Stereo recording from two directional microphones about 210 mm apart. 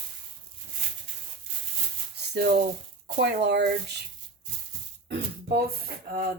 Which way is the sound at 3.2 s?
55° right (ahead or behind).